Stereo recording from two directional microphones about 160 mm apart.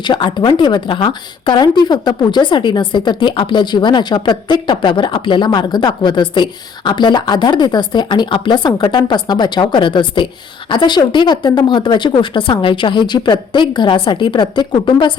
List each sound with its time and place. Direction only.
0.0 s speech: 30° left (ahead or behind)